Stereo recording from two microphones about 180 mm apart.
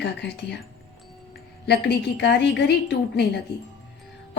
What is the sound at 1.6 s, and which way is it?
Speech, 70° left (ahead or behind).